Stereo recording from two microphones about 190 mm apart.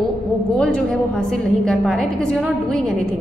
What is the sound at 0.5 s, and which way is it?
A woman's voice, 5° left (ahead or behind).